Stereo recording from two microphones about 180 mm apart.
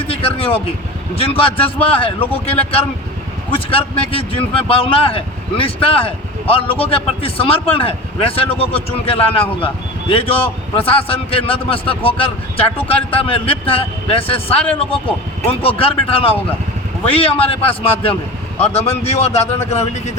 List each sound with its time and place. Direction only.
0.1 s a man's voice: 30° left (ahead or behind)
15.6 s a man's voice: 30° left (ahead or behind)